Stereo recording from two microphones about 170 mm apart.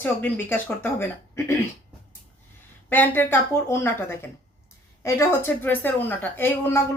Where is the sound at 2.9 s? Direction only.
10° left (ahead or behind).